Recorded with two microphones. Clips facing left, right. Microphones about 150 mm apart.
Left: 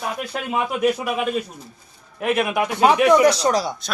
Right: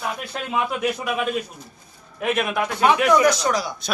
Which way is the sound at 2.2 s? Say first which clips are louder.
Left 2 dB; 5° left (ahead or behind).